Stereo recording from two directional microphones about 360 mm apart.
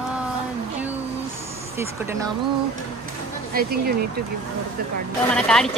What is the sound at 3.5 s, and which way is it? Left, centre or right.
Speech, right.